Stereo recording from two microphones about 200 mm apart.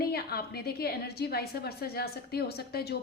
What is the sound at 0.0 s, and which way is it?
A woman's voice, 50° left (ahead or behind).